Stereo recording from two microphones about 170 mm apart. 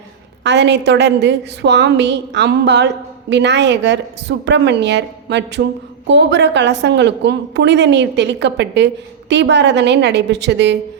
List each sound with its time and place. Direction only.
0.4 s a woman's voice: 90° right